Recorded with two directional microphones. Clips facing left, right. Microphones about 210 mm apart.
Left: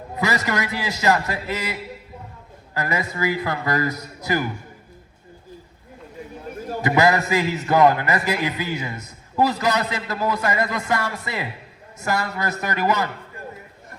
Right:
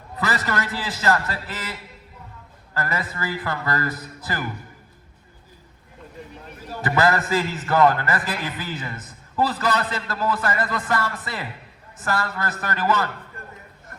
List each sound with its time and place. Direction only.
0.2 s a man's voice: 15° left (ahead or behind)
6.8 s a man's voice: 15° left (ahead or behind)